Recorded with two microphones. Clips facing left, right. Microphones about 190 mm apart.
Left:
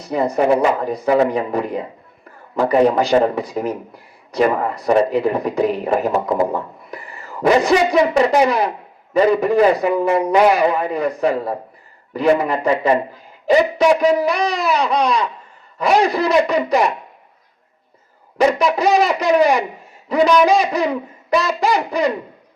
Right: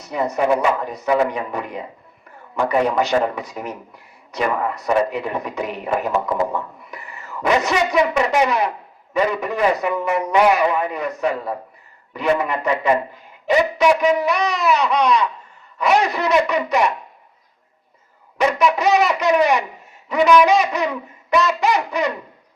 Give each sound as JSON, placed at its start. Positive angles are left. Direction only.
{"t": 0.0, "sound": "speech", "side_deg": 30}
{"t": 18.3, "sound": "speech", "side_deg": 35}